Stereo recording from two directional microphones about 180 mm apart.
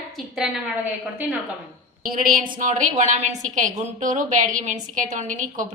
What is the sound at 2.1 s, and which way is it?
A woman's voice, 50° right (ahead or behind).